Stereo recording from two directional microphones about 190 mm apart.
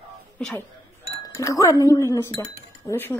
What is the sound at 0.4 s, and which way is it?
Speech, 5° left (ahead or behind).